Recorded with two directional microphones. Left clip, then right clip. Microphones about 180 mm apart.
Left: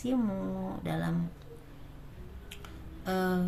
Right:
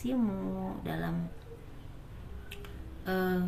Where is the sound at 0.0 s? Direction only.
35° left (ahead or behind).